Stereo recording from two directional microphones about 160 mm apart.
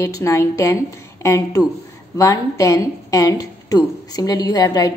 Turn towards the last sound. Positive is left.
turn(degrees=20)  # may be behind; listen again after turning